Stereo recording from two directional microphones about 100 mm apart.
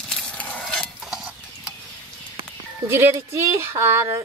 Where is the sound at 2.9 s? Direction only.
25° right (ahead or behind).